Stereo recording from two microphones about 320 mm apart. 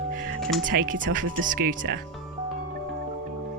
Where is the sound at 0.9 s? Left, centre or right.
Right.